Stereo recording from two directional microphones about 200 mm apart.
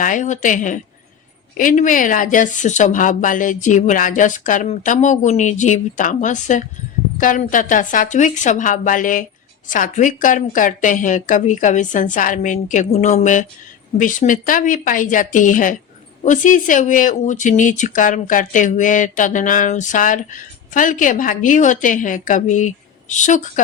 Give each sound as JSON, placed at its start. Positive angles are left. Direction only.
{"t": 0.0, "sound": "speech", "side_deg": 40}